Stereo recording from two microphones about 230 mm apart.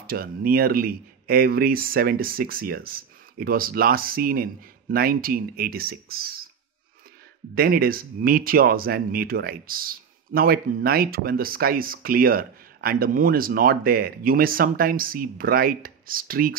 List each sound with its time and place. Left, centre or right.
0.0 s speech: right
7.5 s speech: right